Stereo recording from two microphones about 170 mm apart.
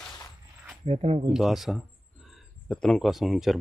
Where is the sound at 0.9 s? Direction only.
35° right (ahead or behind).